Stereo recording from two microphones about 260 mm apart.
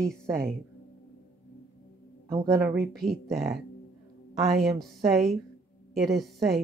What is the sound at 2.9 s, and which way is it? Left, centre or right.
Speech, centre.